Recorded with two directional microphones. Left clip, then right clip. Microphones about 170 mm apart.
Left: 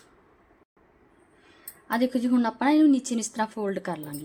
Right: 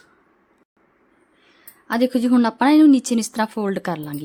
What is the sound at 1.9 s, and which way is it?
A woman's voice, 35° right (ahead or behind).